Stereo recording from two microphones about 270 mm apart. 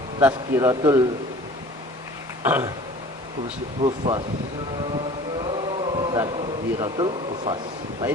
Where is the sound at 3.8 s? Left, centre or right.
Centre.